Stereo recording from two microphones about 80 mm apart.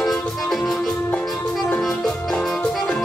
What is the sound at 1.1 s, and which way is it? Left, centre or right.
Music, centre.